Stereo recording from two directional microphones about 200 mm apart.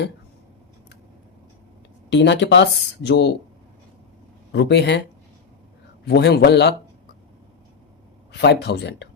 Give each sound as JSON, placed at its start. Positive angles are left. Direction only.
{"t": 2.0, "sound": "speech", "side_deg": 60}
{"t": 4.5, "sound": "speech", "side_deg": 60}
{"t": 6.1, "sound": "speech", "side_deg": 55}
{"t": 8.3, "sound": "speech", "side_deg": 55}